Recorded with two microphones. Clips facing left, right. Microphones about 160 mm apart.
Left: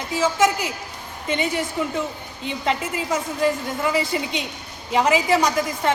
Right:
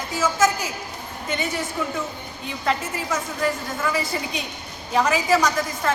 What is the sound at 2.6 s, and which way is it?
A woman's voice, 20° left (ahead or behind).